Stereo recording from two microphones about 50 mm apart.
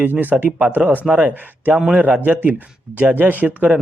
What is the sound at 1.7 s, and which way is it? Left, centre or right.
Speech, centre.